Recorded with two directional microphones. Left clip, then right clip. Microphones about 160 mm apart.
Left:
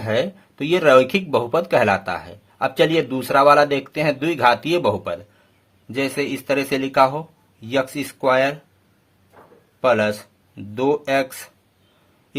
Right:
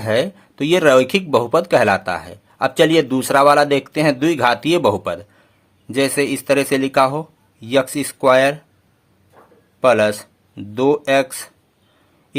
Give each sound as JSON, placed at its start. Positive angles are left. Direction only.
{"t": 0.0, "sound": "a man's voice", "side_deg": -25}
{"t": 9.8, "sound": "speech", "side_deg": -30}